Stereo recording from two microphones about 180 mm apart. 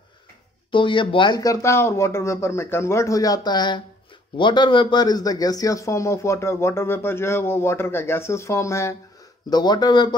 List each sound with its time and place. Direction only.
0.7 s a man's voice: 30° left (ahead or behind)